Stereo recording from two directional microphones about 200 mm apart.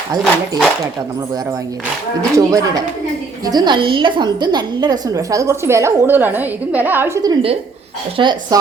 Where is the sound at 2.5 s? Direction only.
15° right (ahead or behind).